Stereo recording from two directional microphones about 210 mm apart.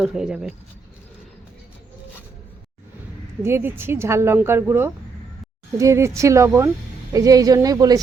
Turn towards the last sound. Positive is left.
turn(degrees=-15)  # may be behind; listen again after turning